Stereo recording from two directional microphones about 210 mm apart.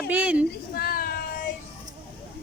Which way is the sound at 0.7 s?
45° left (ahead or behind).